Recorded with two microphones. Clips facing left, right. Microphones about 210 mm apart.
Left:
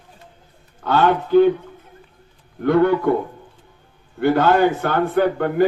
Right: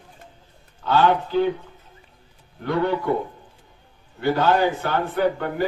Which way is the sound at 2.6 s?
55° left (ahead or behind).